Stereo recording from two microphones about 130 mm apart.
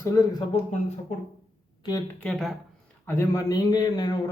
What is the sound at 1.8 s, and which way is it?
Speech, 30° left (ahead or behind).